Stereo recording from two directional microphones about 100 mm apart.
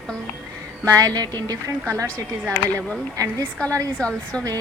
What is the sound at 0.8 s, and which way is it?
A woman's voice, 35° right (ahead or behind).